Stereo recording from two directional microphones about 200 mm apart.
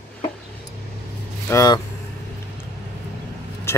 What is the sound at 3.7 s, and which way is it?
Vehicle, 10° left (ahead or behind).